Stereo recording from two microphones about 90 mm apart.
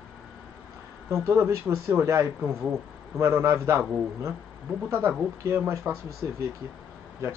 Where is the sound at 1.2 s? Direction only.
30° right (ahead or behind).